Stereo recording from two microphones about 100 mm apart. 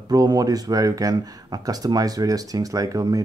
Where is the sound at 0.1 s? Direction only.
40° right (ahead or behind).